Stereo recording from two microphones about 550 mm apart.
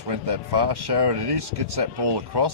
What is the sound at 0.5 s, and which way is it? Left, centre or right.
Speech, right.